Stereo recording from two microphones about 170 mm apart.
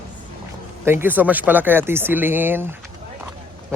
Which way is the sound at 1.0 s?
10° right (ahead or behind).